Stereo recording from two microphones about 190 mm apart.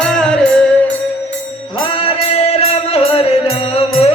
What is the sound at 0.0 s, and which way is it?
Music, 5° left (ahead or behind).